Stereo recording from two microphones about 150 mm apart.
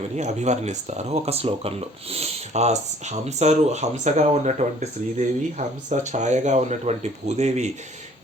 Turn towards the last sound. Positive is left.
turn(degrees=-50)  # may be behind; listen again after turning